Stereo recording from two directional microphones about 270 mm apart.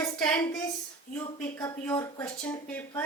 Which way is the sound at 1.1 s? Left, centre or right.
Left.